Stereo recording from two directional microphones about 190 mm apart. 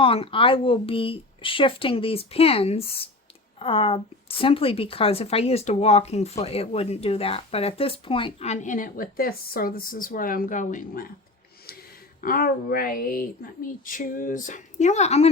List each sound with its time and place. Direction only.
0.0 s a woman's voice: 30° left (ahead or behind); by 11.1 s 45° left (ahead or behind)
12.2 s a woman's voice: 50° left (ahead or behind)